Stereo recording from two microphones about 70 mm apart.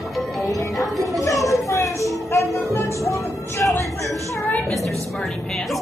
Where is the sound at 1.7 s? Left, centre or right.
Left.